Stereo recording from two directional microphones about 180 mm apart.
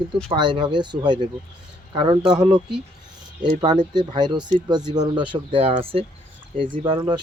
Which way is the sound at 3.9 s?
25° right (ahead or behind).